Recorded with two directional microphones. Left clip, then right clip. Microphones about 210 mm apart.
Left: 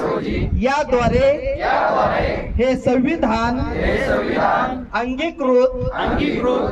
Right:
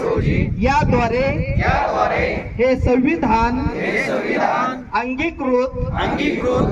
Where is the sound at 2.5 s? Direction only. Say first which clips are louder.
Right 1 dB; 45° left (ahead or behind).